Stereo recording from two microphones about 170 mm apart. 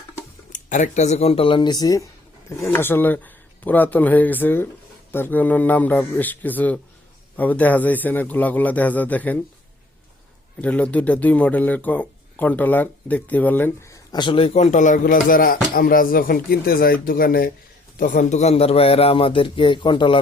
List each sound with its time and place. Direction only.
0.5 s a man's voice: 45° left (ahead or behind); by 9.4 s 10° left (ahead or behind)
10.6 s speech: 10° left (ahead or behind); by 17.5 s 60° left (ahead or behind)
17.9 s a man's voice: 50° left (ahead or behind); by 20.1 s 25° left (ahead or behind)